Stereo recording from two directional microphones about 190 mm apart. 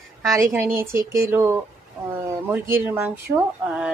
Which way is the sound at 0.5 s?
15° right (ahead or behind).